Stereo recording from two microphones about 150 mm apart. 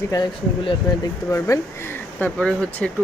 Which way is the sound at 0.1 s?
30° left (ahead or behind).